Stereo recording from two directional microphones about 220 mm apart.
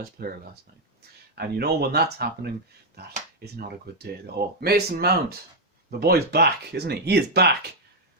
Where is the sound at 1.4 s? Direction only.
45° right (ahead or behind).